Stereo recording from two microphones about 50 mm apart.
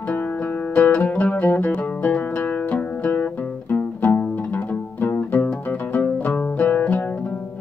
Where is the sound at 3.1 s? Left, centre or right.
Left.